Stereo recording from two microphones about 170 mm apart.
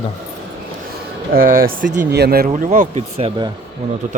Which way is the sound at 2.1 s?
70° right (ahead or behind).